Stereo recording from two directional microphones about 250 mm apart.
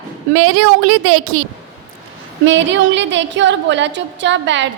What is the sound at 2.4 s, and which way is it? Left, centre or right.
A woman's voice, right.